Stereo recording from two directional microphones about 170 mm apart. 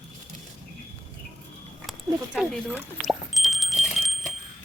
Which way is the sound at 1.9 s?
Centre (ahead or behind).